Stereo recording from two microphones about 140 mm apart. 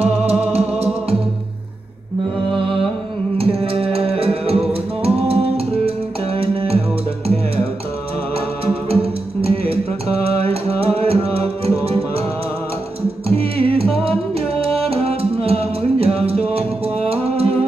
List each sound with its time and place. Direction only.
0.3 s music: 45° right (ahead or behind)
2.5 s music: 40° right (ahead or behind)
8.8 s music: 45° right (ahead or behind)
13.3 s music: 45° right (ahead or behind)